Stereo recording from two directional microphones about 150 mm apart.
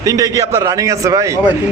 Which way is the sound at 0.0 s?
20° right (ahead or behind).